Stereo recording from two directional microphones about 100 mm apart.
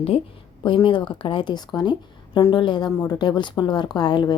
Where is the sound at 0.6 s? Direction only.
55° left (ahead or behind).